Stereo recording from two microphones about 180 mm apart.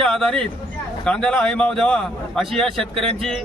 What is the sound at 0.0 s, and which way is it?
A man's voice, 5° left (ahead or behind).